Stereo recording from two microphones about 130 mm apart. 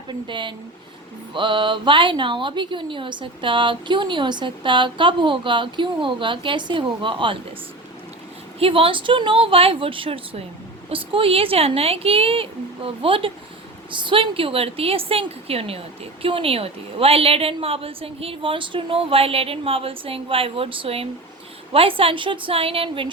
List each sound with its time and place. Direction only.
0.1 s speech: 35° right (ahead or behind)
8.5 s a woman's voice: 45° right (ahead or behind)